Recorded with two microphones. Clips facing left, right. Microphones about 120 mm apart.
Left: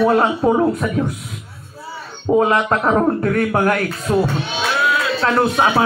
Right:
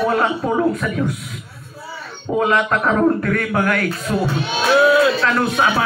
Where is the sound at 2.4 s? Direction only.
30° left (ahead or behind).